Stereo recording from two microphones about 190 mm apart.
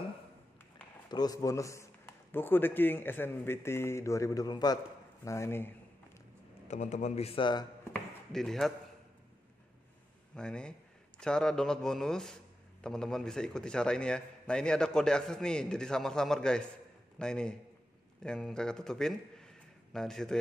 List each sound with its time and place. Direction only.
1.0 s a man's voice: 20° left (ahead or behind)
6.7 s a man's voice: 40° left (ahead or behind)
8.3 s a man's voice: centre (ahead or behind)
10.3 s a man's voice: 5° left (ahead or behind)